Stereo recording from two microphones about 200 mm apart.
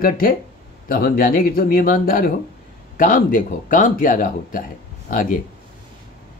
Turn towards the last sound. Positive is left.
turn(degrees=45)  # may be behind; listen again after turning